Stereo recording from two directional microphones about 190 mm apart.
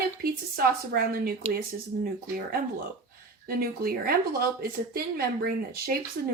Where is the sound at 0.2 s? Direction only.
50° right (ahead or behind).